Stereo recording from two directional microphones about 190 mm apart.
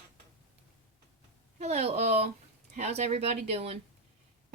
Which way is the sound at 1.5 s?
35° right (ahead or behind).